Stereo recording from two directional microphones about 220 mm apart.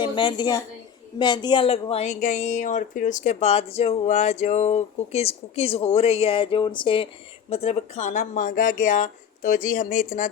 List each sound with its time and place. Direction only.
0.0 s speech: 20° left (ahead or behind)